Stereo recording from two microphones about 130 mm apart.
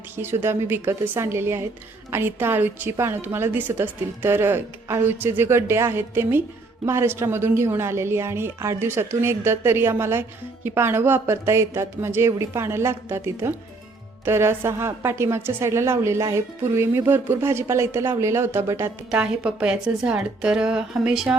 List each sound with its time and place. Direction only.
0.2 s a woman's voice: 20° right (ahead or behind)
19.1 s a woman's voice: 10° right (ahead or behind)